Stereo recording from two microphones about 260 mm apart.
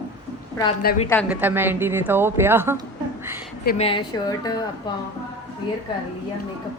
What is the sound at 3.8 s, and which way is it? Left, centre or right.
Speech, centre.